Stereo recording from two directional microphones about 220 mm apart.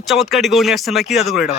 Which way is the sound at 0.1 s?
Centre (ahead or behind).